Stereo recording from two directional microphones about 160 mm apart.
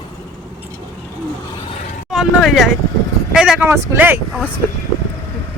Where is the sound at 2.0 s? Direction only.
Centre (ahead or behind).